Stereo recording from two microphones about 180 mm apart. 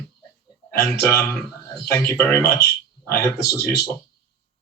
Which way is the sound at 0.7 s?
15° left (ahead or behind).